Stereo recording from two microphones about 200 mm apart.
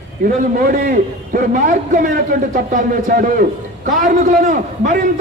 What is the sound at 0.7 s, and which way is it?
A man's voice, 45° right (ahead or behind).